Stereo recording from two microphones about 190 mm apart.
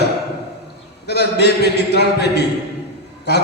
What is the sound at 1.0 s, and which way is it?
A man's voice, 60° left (ahead or behind).